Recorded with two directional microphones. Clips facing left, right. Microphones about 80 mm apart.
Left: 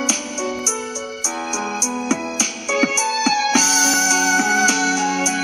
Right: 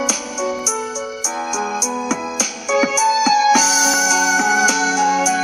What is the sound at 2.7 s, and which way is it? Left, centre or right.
Music, centre.